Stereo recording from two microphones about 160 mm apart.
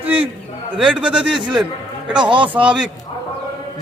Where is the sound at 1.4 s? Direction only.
30° right (ahead or behind).